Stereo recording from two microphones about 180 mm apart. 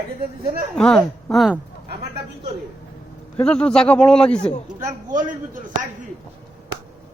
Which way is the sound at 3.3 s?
5° left (ahead or behind).